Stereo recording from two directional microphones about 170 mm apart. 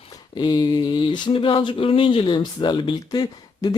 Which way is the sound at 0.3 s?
25° left (ahead or behind).